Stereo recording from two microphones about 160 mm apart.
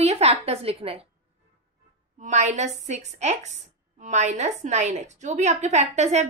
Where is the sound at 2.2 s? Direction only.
45° right (ahead or behind).